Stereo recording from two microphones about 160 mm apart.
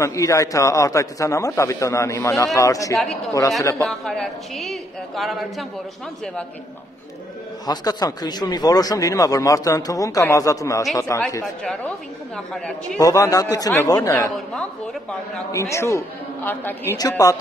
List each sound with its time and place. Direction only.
0.0 s speech: 20° left (ahead or behind)
3.8 s a woman's voice: 5° left (ahead or behind)
7.6 s speech: 25° left (ahead or behind)
11.4 s a woman's voice: 5° left (ahead or behind)
13.0 s speech: 20° left (ahead or behind)
14.3 s a woman's voice: 5° left (ahead or behind)
15.5 s a woman's voice: 20° left (ahead or behind)
17.2 s speech: 20° left (ahead or behind)